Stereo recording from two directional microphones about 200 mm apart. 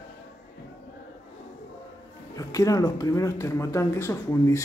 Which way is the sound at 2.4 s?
15° left (ahead or behind).